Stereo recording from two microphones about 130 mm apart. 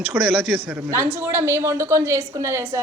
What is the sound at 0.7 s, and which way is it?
A woman's voice, 15° right (ahead or behind).